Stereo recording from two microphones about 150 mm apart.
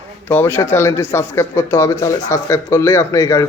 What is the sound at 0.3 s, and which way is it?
A man's voice, 15° left (ahead or behind).